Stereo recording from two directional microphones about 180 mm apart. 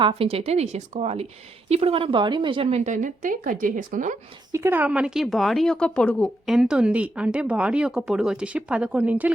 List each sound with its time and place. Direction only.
0.0 s speech: 35° right (ahead or behind)
4.5 s a woman's voice: 15° right (ahead or behind)